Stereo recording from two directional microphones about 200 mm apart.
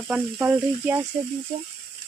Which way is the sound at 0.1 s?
10° right (ahead or behind).